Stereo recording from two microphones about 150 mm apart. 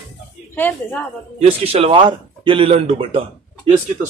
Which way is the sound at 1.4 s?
40° right (ahead or behind).